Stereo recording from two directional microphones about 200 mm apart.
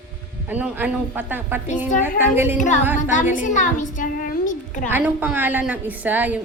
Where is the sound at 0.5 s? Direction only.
5° right (ahead or behind).